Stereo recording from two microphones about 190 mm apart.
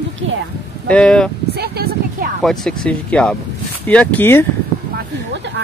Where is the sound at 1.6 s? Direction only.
55° right (ahead or behind).